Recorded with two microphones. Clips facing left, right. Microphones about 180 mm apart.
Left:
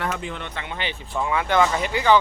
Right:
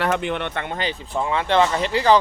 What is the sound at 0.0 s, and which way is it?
Speech, 70° right (ahead or behind).